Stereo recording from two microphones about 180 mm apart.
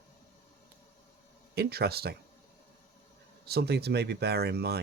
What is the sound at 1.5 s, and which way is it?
Speech, 65° right (ahead or behind).